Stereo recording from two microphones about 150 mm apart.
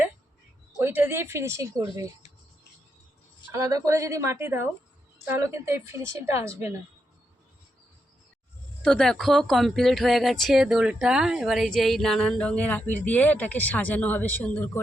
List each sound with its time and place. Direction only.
0.8 s a woman's voice: 15° right (ahead or behind)
3.5 s a woman's voice: 20° right (ahead or behind)
8.8 s a woman's voice: 5° left (ahead or behind)